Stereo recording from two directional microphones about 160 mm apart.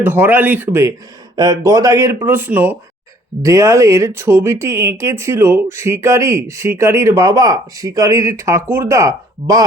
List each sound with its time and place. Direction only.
0.0 s speech: 10° right (ahead or behind)